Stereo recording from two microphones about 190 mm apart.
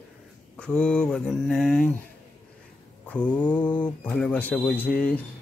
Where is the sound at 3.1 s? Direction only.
5° left (ahead or behind).